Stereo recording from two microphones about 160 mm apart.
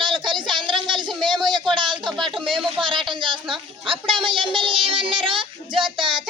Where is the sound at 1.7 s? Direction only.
30° right (ahead or behind).